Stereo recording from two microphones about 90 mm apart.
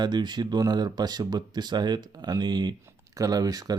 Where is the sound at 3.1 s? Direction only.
40° right (ahead or behind).